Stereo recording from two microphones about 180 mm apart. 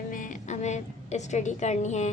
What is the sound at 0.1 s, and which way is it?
A woman's voice, 45° left (ahead or behind).